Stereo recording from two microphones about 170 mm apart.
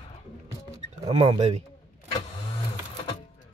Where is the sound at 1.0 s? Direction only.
35° right (ahead or behind).